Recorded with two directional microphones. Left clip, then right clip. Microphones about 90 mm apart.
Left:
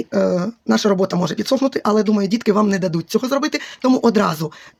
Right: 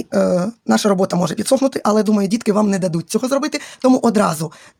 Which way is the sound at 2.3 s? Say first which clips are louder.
Even; 35° right (ahead or behind).